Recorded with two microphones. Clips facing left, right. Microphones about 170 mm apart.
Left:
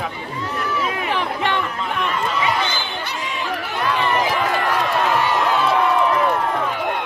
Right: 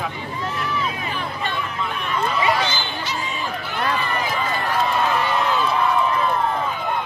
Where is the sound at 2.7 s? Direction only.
75° left (ahead or behind).